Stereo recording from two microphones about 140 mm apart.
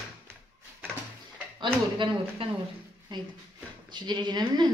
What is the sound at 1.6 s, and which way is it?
Speech, 40° right (ahead or behind).